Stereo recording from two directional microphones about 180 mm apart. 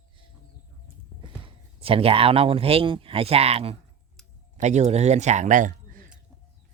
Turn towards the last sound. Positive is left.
turn(degrees=-45)  # may be behind; listen again after turning